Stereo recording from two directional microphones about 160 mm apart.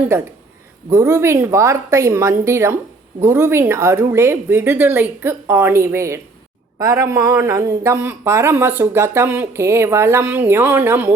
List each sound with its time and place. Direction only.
0.9 s a man's voice: 20° right (ahead or behind)